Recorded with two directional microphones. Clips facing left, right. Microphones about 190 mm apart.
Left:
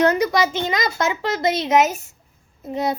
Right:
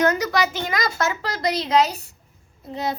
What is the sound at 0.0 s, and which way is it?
A child's voice, 30° left (ahead or behind).